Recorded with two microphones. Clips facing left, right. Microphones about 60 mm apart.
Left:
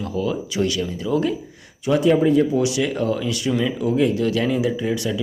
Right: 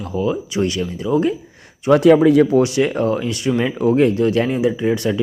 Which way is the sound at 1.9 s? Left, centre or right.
Right.